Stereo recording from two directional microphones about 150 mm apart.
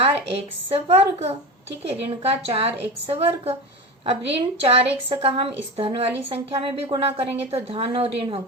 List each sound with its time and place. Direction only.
0.0 s a woman's voice: 40° right (ahead or behind)